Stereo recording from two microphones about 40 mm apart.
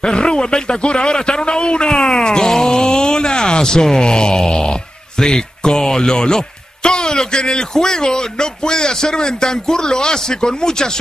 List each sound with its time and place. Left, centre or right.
0.0 s a man's voice: left